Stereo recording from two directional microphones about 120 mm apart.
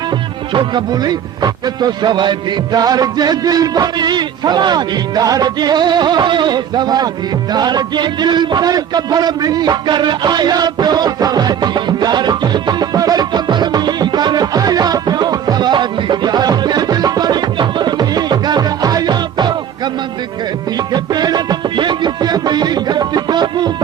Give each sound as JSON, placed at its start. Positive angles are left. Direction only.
{"t": 0.5, "sound": "speech", "side_deg": -40}
{"t": 7.5, "sound": "a sound", "side_deg": -35}
{"t": 20.7, "sound": "music", "side_deg": -35}